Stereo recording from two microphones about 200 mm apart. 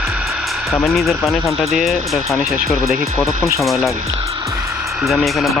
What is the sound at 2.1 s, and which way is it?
Speech, 15° left (ahead or behind).